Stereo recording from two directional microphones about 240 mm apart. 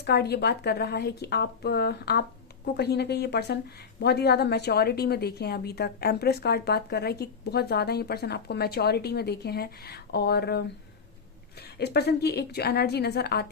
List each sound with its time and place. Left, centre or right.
0.0 s a woman's voice: left
11.8 s speech: left